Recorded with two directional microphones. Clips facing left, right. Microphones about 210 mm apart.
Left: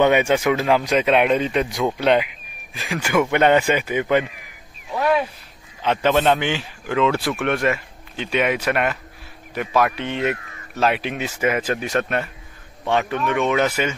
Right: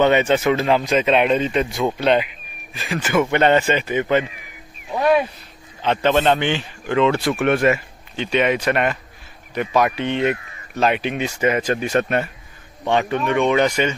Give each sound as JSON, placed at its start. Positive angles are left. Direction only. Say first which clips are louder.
{"t": 0.0, "sound": "speech", "louder": "right 1 dB", "side_deg": 10}
{"t": 4.9, "sound": "speech", "louder": "right 3 dB", "side_deg": -15}
{"t": 5.8, "sound": "speech", "louder": "right 1 dB", "side_deg": 10}
{"t": 8.3, "sound": "speech", "louder": "right 2 dB", "side_deg": 5}